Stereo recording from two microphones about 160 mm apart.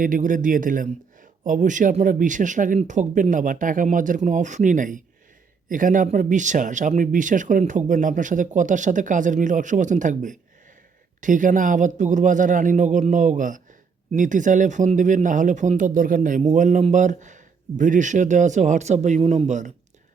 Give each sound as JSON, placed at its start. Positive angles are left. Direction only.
{"t": 0.0, "sound": "speech", "side_deg": -55}